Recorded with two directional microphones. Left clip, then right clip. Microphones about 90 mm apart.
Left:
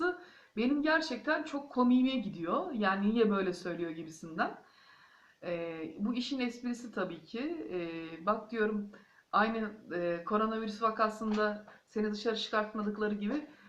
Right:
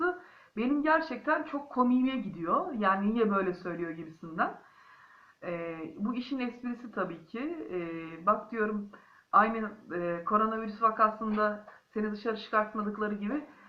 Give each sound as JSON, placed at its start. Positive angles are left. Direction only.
{"t": 0.5, "sound": "speech", "side_deg": 30}
{"t": 5.4, "sound": "speech", "side_deg": 30}